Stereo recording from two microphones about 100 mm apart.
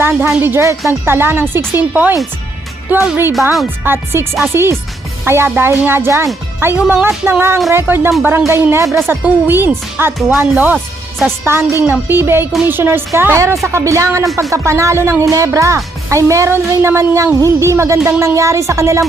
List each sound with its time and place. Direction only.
0.0 s speech: 20° right (ahead or behind)